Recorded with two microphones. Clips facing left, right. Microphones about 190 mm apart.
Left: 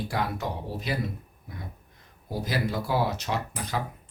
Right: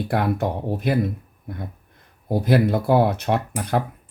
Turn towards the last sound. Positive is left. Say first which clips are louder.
# right 8 dB
turn(degrees=-60)  # may be behind; listen again after turning